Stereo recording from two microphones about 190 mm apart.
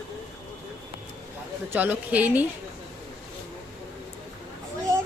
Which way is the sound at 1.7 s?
10° right (ahead or behind).